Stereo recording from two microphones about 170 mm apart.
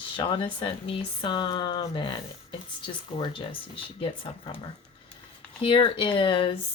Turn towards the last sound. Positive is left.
turn(degrees=30)  # may be behind; listen again after turning